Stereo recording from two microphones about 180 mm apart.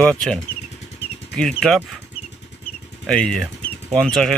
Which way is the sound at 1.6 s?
Centre (ahead or behind).